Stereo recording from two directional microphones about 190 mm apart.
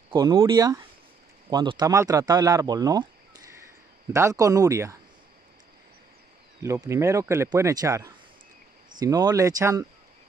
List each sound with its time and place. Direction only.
0.1 s speech: 20° right (ahead or behind)
4.1 s speech: 15° right (ahead or behind)
6.6 s speech: 15° right (ahead or behind)